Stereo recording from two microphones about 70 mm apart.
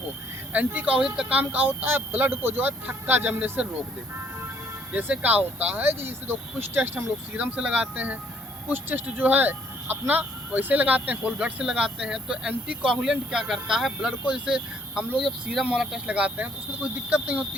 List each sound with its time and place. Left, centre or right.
0.5 s speech: right
0.9 s speech: centre
1.4 s speech: right
4.9 s speech: centre
16.0 s speech: centre